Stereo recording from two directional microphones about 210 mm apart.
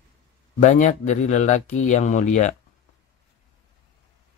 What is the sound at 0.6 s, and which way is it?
Speech, 35° left (ahead or behind).